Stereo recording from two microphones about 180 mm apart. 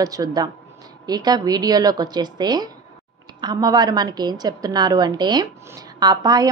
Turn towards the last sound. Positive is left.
turn(degrees=-20)  # may be behind; listen again after turning